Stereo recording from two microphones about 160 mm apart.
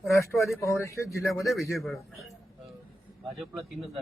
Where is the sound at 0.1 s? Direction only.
20° left (ahead or behind).